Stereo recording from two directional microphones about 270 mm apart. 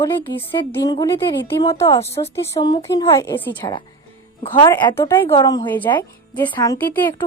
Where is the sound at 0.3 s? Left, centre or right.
Centre.